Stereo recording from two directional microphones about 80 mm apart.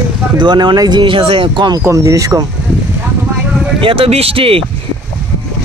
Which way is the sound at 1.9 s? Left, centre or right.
Right.